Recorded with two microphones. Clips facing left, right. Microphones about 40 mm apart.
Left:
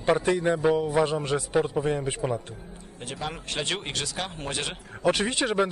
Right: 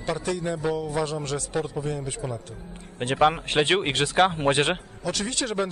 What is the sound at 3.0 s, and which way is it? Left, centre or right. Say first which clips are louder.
Speech: right 14 dB; right.